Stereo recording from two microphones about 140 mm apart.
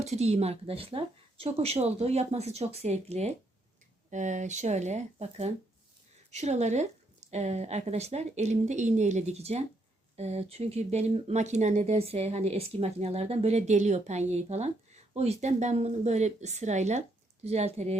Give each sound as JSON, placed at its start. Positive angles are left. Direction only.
{"t": 0.0, "sound": "speech", "side_deg": -50}
{"t": 4.1, "sound": "speech", "side_deg": -60}